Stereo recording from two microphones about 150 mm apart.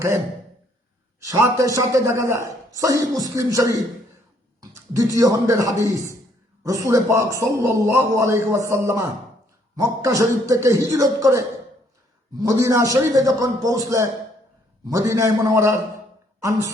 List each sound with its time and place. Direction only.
1.2 s a man's voice: 20° right (ahead or behind)
4.6 s a sound: 20° right (ahead or behind)
5.1 s a man's voice: 20° right (ahead or behind)